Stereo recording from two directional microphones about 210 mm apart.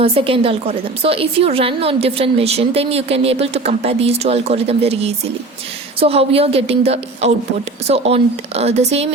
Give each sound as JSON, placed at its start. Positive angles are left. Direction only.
{"t": 0.0, "sound": "a woman's voice", "side_deg": -25}